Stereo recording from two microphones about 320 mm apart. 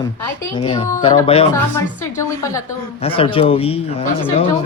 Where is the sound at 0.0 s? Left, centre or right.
Centre.